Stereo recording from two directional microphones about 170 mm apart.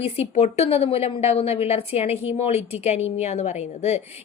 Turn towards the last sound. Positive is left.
turn(degrees=40)  # may be behind; listen again after turning